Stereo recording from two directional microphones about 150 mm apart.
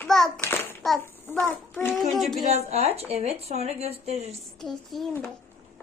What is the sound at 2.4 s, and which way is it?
Speech, 50° right (ahead or behind).